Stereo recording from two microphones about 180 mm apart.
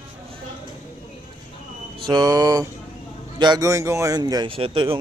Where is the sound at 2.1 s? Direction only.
20° right (ahead or behind).